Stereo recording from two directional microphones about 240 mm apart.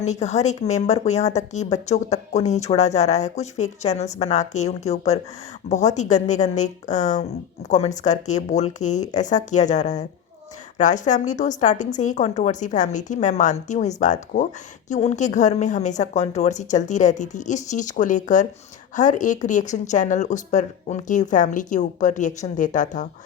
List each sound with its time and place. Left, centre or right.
0.0 s a woman's voice: left